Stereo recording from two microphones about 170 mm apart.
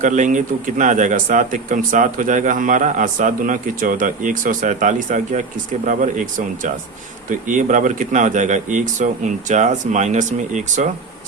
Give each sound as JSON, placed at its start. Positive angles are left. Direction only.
{"t": 0.0, "sound": "speech", "side_deg": -50}